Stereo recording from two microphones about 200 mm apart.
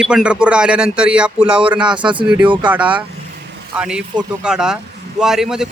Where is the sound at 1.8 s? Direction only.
25° right (ahead or behind).